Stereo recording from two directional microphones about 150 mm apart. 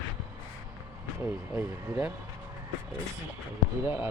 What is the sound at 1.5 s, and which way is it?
Speech, 5° right (ahead or behind).